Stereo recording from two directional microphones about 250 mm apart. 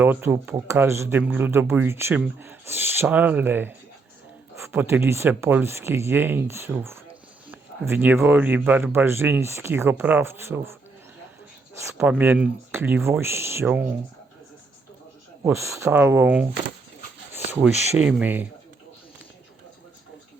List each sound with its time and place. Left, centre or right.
0.0 s speech: centre
11.8 s speech: centre
15.4 s speech: centre
17.7 s speech: left
17.9 s speech: centre